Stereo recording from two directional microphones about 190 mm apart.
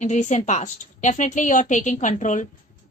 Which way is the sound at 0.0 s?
40° left (ahead or behind).